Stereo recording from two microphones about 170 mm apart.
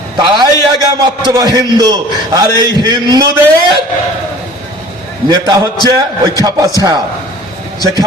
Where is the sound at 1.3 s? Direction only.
20° right (ahead or behind).